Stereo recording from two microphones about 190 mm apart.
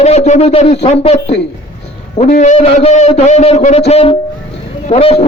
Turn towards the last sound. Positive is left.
turn(degrees=35)  # may be behind; listen again after turning